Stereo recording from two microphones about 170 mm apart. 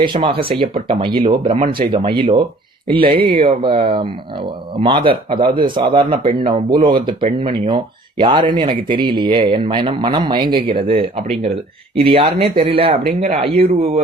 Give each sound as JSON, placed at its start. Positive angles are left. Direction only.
{"t": 0.0, "sound": "speech", "side_deg": -30}